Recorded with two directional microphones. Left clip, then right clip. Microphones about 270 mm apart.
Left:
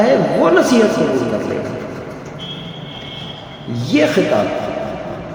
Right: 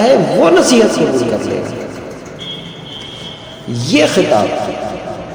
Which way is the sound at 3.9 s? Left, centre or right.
Centre.